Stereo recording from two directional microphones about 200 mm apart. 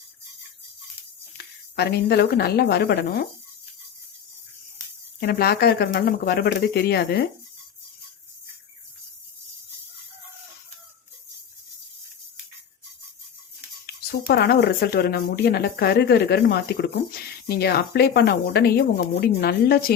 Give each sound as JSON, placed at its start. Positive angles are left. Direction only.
{"t": 1.7, "sound": "speech", "side_deg": 55}
{"t": 5.2, "sound": "speech", "side_deg": 50}
{"t": 13.8, "sound": "speech", "side_deg": 50}